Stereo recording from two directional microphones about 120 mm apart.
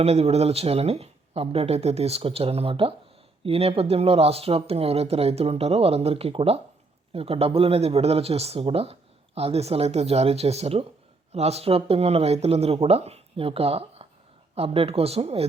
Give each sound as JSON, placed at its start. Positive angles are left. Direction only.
{"t": 0.0, "sound": "speech", "side_deg": -65}